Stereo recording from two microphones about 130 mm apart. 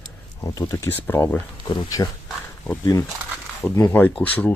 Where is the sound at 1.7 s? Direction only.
30° left (ahead or behind).